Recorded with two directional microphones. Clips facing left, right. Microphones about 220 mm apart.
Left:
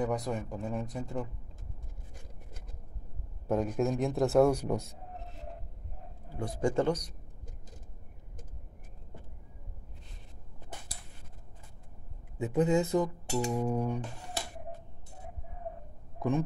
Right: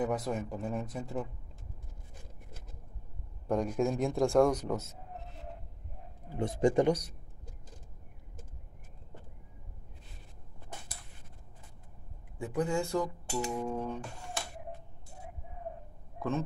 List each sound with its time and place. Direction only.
0.0 s a man's voice: 5° right (ahead or behind)
3.4 s a man's voice: 5° left (ahead or behind)
6.3 s speech: 20° right (ahead or behind)
12.4 s speech: 20° left (ahead or behind)
16.2 s speech: 15° left (ahead or behind)